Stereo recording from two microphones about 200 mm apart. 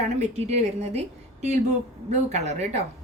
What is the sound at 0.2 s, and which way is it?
A woman's voice, 35° right (ahead or behind).